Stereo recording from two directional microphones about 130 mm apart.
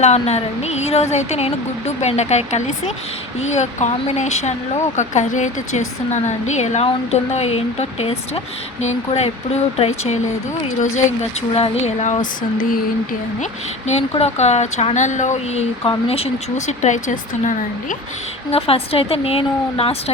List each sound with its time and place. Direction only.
0.0 s a woman's voice: 55° left (ahead or behind)
11.5 s speech: 50° left (ahead or behind); by 12.8 s 90° left
13.4 s speech: 60° left (ahead or behind)
15.8 s speech: 45° left (ahead or behind); by 17.9 s 75° left (ahead or behind)
18.5 s a woman's voice: 50° left (ahead or behind)